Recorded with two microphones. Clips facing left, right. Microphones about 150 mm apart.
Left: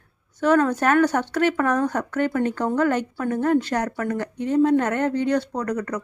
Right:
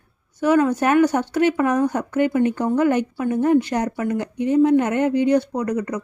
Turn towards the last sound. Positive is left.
turn(degrees=-10)  # may be behind; listen again after turning